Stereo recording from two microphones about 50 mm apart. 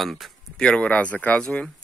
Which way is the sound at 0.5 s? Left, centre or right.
Centre.